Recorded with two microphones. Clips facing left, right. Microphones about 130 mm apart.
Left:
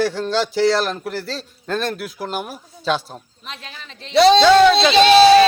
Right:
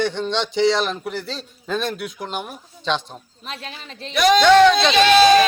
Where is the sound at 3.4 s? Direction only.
40° right (ahead or behind).